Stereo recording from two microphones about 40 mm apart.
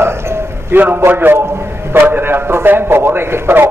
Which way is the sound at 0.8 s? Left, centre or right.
Right.